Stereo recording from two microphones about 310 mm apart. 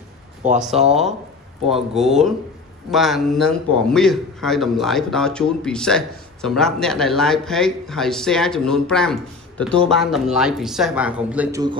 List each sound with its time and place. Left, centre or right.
0.4 s speech: right
2.0 s a man's voice: centre